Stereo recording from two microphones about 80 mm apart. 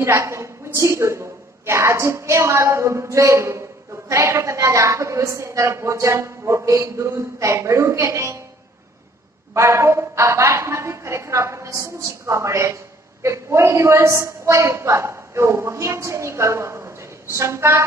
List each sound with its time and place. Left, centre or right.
0.0 s a woman's voice: right
9.5 s a woman's voice: right